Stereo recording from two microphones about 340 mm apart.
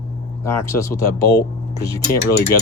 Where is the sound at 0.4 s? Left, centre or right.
Centre.